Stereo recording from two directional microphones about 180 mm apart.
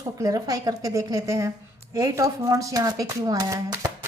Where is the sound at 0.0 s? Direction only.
20° right (ahead or behind).